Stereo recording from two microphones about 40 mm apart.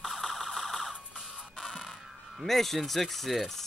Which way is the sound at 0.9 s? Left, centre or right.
Right.